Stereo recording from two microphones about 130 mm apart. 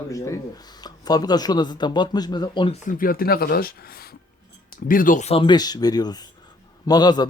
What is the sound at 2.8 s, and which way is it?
Speech, 90° left.